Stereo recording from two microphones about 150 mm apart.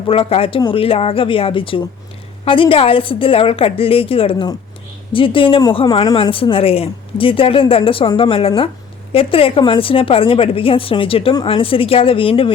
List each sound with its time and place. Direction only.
0.1 s speech: 40° left (ahead or behind)